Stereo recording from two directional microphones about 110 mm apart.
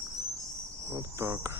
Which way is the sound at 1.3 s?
20° right (ahead or behind).